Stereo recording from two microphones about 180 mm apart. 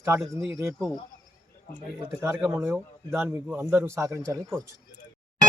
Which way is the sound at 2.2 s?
15° right (ahead or behind).